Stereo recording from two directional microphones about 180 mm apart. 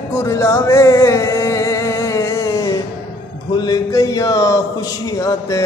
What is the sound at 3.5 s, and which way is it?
A man's voice, 20° left (ahead or behind).